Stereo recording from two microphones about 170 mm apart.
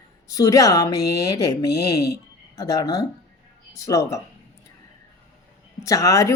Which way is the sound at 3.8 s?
20° left (ahead or behind).